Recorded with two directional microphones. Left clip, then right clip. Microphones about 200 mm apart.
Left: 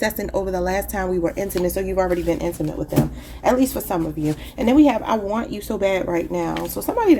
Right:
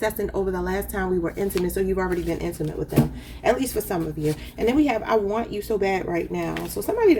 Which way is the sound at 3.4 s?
35° left (ahead or behind).